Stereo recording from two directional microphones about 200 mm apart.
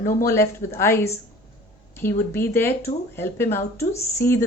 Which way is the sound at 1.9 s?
10° left (ahead or behind).